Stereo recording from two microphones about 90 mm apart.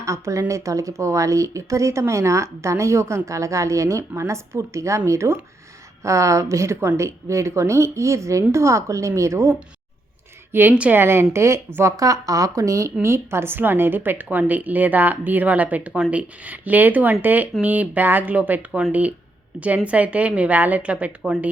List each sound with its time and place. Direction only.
0.0 s a woman's voice: 35° right (ahead or behind); by 21.1 s 15° right (ahead or behind)